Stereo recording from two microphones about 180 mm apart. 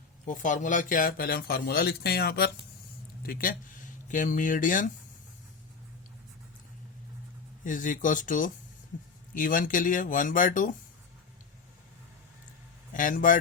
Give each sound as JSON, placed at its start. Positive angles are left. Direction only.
{"t": 0.3, "sound": "speech", "side_deg": 45}
{"t": 7.6, "sound": "speech", "side_deg": 45}
{"t": 12.9, "sound": "a man's voice", "side_deg": 45}